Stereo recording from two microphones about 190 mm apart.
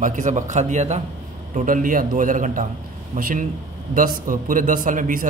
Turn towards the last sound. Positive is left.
turn(degrees=-45)  # may be behind; listen again after turning